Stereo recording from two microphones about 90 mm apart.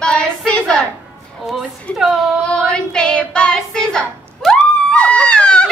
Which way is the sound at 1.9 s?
15° left (ahead or behind).